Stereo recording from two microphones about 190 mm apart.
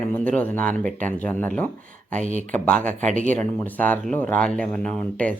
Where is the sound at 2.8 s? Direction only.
40° right (ahead or behind).